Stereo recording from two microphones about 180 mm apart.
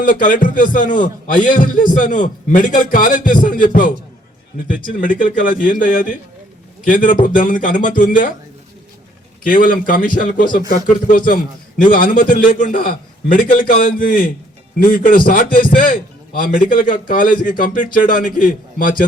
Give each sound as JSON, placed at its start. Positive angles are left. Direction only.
{"t": 0.0, "sound": "a man's voice", "side_deg": 50}
{"t": 9.5, "sound": "a man's voice", "side_deg": 50}